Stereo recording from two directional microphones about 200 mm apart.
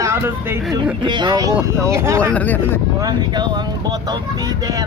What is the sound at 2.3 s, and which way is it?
Speech, 10° left (ahead or behind).